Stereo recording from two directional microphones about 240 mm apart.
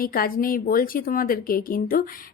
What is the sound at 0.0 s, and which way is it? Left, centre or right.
Speech, left.